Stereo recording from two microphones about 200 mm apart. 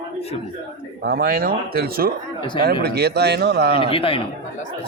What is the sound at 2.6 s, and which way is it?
A man's voice, 50° right (ahead or behind).